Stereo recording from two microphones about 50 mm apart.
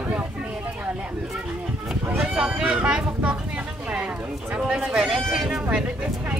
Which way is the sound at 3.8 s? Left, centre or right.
Right.